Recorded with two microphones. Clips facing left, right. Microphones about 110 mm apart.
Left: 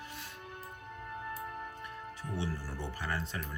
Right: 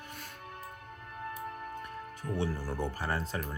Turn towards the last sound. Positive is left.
turn(degrees=-40)  # may be behind; listen again after turning